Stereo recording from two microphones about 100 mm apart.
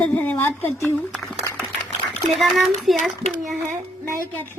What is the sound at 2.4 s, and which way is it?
Speech, centre (ahead or behind).